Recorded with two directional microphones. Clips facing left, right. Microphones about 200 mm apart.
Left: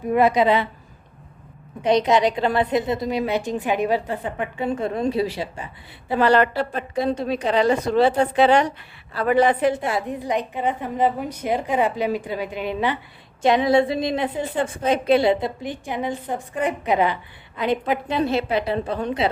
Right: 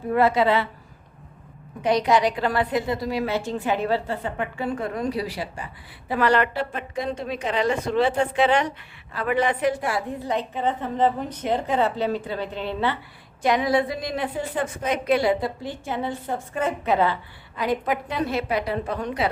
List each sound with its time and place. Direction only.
0.1 s a woman's voice: 15° left (ahead or behind)
1.8 s a woman's voice: 20° left (ahead or behind)
13.4 s a woman's voice: 25° left (ahead or behind)